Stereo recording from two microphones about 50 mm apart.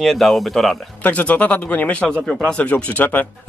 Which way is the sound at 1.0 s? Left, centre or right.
Left.